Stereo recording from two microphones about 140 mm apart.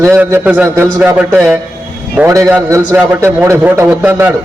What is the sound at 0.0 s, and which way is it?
A man's voice, 20° right (ahead or behind).